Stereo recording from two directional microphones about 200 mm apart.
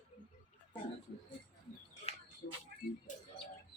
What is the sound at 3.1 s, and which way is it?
Bird, 40° left (ahead or behind).